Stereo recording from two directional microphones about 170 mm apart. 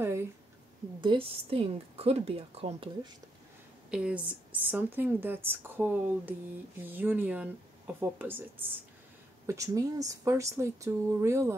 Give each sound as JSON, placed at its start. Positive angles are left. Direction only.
{"t": 1.0, "sound": "a woman's voice", "side_deg": -30}
{"t": 3.9, "sound": "a woman's voice", "side_deg": -5}